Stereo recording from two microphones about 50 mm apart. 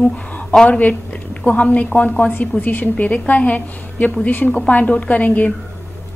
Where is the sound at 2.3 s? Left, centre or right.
Left.